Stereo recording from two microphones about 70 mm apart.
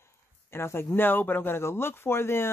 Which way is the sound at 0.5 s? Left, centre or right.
Left.